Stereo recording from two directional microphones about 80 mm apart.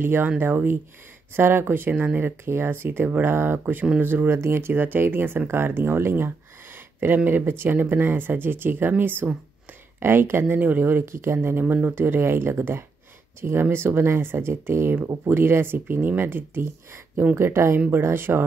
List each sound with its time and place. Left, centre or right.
0.0 s speech: right